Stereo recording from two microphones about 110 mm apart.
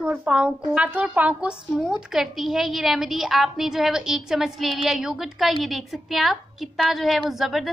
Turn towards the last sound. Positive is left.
turn(degrees=0)  # may be behind; listen again after turning